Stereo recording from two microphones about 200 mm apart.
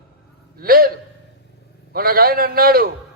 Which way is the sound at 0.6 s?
45° right (ahead or behind).